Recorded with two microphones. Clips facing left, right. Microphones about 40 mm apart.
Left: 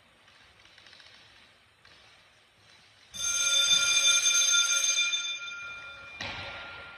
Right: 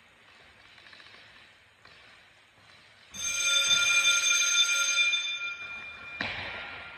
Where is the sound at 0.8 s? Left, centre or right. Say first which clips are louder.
Right 4 dB; right.